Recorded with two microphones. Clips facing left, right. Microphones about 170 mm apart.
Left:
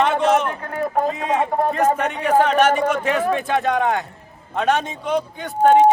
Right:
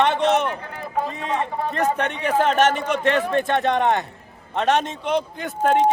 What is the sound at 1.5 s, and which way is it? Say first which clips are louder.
Speech: left 5 dB; 50° left (ahead or behind).